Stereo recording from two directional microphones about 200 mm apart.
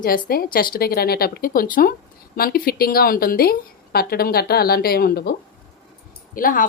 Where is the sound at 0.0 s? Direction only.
45° left (ahead or behind).